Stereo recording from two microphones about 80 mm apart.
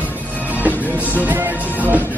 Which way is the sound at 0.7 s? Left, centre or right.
Right.